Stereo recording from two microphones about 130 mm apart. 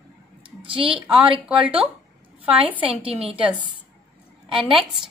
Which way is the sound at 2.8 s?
45° right (ahead or behind).